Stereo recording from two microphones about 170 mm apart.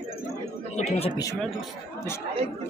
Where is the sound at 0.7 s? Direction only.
40° left (ahead or behind).